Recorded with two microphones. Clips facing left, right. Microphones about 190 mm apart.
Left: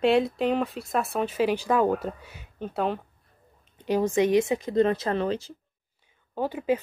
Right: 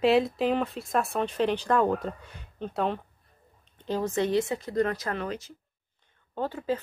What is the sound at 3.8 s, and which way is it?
Speech, 15° left (ahead or behind).